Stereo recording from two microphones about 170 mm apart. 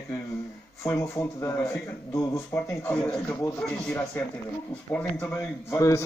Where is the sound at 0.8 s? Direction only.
15° left (ahead or behind).